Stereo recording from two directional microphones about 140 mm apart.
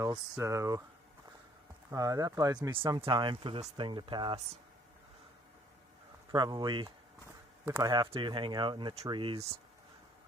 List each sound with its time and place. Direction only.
0.3 s speech: 20° right (ahead or behind)
1.9 s speech: 25° right (ahead or behind)
6.3 s speech: 30° right (ahead or behind)